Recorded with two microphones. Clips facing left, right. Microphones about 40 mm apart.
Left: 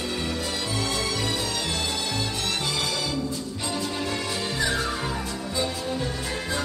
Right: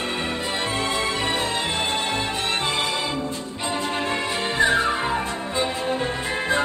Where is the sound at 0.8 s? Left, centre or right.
Right.